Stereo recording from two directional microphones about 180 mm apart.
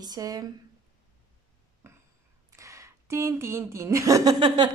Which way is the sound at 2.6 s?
15° right (ahead or behind).